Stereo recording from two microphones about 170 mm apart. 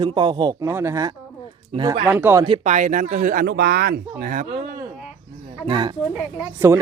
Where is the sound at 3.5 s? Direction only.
70° right (ahead or behind).